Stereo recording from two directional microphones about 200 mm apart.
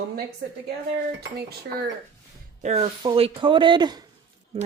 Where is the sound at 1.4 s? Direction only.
50° right (ahead or behind).